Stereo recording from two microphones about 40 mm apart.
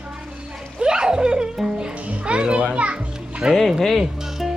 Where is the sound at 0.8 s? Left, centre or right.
Centre.